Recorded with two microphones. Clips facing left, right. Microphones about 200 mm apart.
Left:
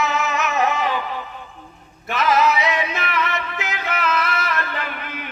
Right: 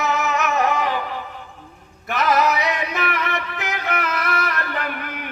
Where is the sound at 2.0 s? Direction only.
50° right (ahead or behind).